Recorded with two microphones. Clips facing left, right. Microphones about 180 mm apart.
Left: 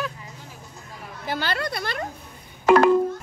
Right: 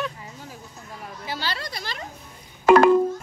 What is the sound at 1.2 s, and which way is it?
Speech, 55° left (ahead or behind).